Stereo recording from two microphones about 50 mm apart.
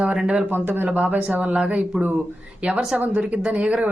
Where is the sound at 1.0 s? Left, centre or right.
Right.